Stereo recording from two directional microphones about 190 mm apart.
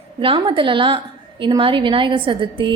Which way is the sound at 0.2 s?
25° right (ahead or behind).